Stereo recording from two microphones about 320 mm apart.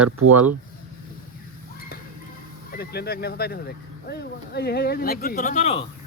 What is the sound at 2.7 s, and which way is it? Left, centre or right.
Speech, left.